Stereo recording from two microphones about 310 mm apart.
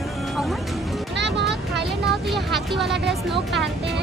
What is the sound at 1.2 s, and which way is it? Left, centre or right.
Vehicle, right.